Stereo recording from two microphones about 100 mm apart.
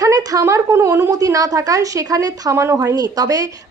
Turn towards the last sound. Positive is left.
turn(degrees=-35)  # may be behind; listen again after turning